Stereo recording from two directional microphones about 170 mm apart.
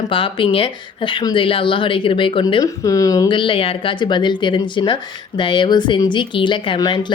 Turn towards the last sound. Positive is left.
turn(degrees=25)  # may be behind; listen again after turning